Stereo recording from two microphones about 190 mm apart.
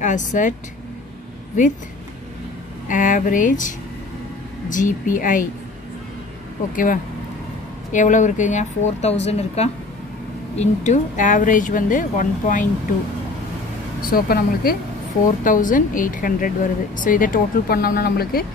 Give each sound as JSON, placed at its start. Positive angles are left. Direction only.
{"t": 0.0, "sound": "a woman's voice", "side_deg": 40}
{"t": 2.9, "sound": "a woman's voice", "side_deg": 45}
{"t": 6.7, "sound": "a woman's voice", "side_deg": 45}
{"t": 14.1, "sound": "a woman's voice", "side_deg": 50}